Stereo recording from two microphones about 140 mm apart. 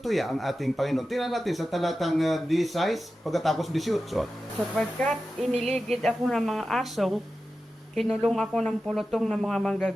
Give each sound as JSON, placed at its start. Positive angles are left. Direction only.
{"t": 0.0, "sound": "speech", "side_deg": 0}
{"t": 5.5, "sound": "music", "side_deg": -50}
{"t": 5.9, "sound": "speech", "side_deg": 0}